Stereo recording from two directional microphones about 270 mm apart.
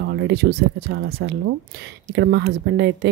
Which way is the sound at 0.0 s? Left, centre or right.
Right.